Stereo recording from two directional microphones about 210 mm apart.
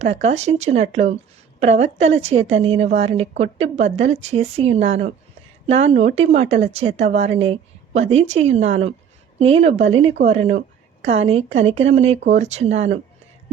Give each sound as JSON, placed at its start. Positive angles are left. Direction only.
{"t": 0.0, "sound": "a woman's voice", "side_deg": -30}